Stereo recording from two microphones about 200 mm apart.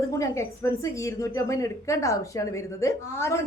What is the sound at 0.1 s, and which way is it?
A woman's voice, 15° left (ahead or behind).